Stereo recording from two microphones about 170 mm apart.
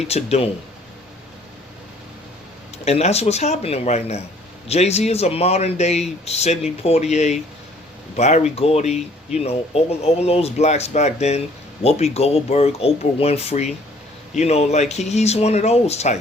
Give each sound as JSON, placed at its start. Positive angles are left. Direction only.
{"t": 0.0, "sound": "speech", "side_deg": 40}
{"t": 2.7, "sound": "speech", "side_deg": 40}